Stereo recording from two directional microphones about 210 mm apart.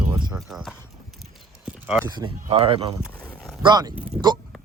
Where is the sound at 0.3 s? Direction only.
Centre (ahead or behind).